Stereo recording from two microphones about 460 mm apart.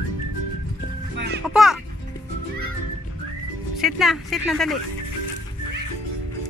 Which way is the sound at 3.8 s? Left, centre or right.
Centre.